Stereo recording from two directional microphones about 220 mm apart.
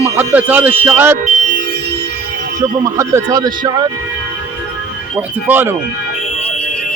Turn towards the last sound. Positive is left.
turn(degrees=-10)  # may be behind; listen again after turning